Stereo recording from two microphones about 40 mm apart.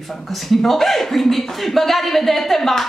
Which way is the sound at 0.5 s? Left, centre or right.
Centre.